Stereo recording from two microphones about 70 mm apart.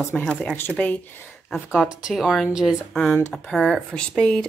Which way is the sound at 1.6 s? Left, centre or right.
Centre.